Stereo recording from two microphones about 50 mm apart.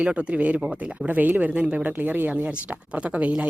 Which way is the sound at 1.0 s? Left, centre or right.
Right.